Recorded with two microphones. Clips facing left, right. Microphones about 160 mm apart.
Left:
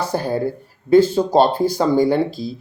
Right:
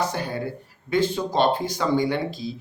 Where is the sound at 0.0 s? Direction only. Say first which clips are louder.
Left 6 dB; 35° left (ahead or behind).